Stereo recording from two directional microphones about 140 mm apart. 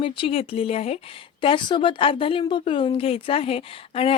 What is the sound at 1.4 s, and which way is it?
Speech, 35° left (ahead or behind).